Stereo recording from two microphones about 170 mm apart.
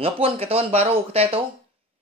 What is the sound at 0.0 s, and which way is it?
Speech, 35° right (ahead or behind).